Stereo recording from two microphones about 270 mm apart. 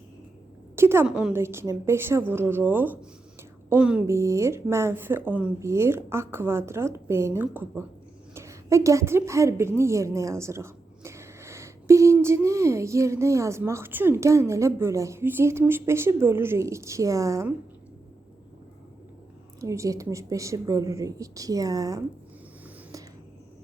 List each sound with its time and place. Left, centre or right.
0.8 s a woman's voice: centre
19.5 s a woman's voice: centre